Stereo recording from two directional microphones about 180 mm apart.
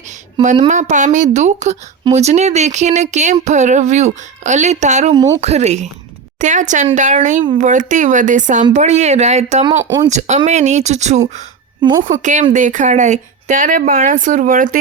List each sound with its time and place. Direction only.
0.4 s speech: 25° right (ahead or behind)
0.7 s speech: 45° right (ahead or behind)
5.1 s speech: 20° right (ahead or behind)
5.4 s speech: 35° right (ahead or behind)
9.6 s speech: 25° right (ahead or behind)
10.1 s speech: 40° right (ahead or behind)
11.8 s speech: 25° right (ahead or behind)
12.0 s speech: 45° right (ahead or behind)